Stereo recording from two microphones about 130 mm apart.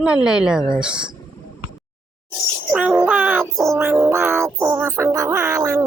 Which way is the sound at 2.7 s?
10° right (ahead or behind).